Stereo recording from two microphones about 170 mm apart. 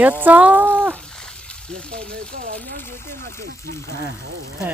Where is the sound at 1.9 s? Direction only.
50° right (ahead or behind).